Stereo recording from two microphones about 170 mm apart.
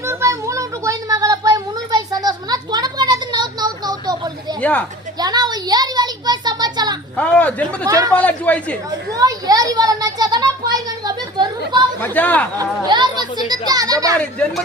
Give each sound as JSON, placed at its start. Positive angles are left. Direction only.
{"t": 0.0, "sound": "a sound", "side_deg": -15}
{"t": 4.6, "sound": "speech", "side_deg": 10}
{"t": 5.2, "sound": "a sound", "side_deg": -25}
{"t": 7.2, "sound": "speech", "side_deg": 10}
{"t": 7.9, "sound": "speech", "side_deg": -20}
{"t": 8.1, "sound": "speech", "side_deg": 10}
{"t": 8.9, "sound": "a sound", "side_deg": -20}
{"t": 12.0, "sound": "speech", "side_deg": 10}
{"t": 12.5, "sound": "speech", "side_deg": -25}
{"t": 14.2, "sound": "speech", "side_deg": 5}